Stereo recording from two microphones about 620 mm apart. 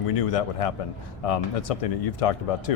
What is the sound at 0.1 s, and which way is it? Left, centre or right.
A man's voice, left.